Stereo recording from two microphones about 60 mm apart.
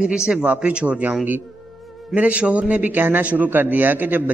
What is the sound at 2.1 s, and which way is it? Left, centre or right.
A man's voice, right.